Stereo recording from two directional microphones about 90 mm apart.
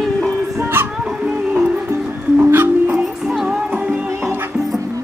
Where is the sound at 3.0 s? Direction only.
5° right (ahead or behind).